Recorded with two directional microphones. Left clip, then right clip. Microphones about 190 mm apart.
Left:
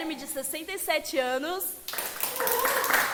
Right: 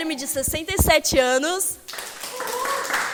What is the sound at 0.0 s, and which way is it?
A woman's voice, 25° right (ahead or behind).